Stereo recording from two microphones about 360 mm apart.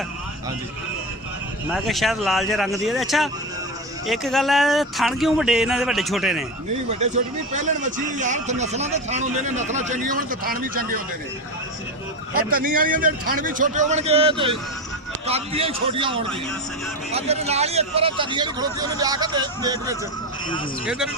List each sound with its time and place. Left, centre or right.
1.7 s speech: centre
7.0 s a man's voice: centre
12.5 s a man's voice: right